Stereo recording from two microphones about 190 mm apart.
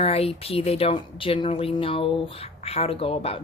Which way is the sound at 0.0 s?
30° left (ahead or behind).